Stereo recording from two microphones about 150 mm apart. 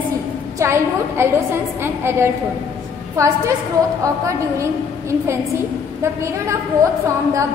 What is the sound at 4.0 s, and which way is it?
Speech, 20° right (ahead or behind).